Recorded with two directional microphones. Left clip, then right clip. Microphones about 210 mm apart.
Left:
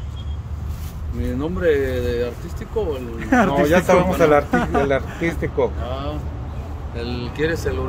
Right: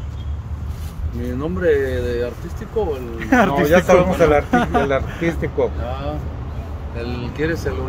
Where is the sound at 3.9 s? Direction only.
40° left (ahead or behind).